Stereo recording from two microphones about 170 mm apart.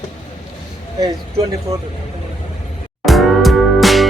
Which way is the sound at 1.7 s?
20° right (ahead or behind).